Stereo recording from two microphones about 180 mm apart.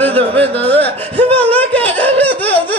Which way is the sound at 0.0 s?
30° right (ahead or behind).